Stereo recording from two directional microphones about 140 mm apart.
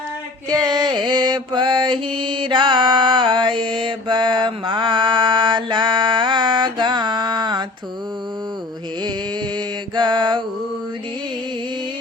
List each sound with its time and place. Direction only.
0.5 s mantra: 30° right (ahead or behind)
9.9 s mantra: 35° right (ahead or behind)